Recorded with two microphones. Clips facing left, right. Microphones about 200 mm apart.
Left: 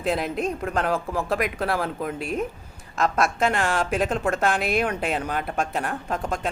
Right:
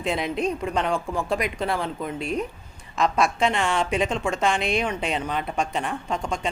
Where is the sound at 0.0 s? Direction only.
Centre (ahead or behind).